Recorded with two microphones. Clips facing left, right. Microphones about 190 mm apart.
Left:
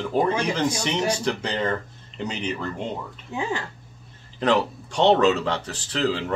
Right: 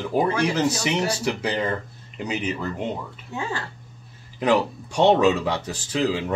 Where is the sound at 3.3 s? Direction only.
15° left (ahead or behind).